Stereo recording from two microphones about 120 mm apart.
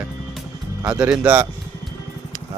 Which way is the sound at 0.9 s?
10° right (ahead or behind).